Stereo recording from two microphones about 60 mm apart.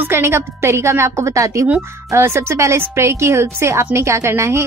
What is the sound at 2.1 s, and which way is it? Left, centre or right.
Speech, right.